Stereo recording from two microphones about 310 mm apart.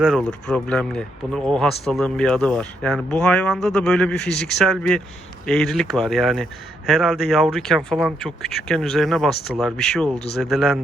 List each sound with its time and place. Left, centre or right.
0.0 s speech: centre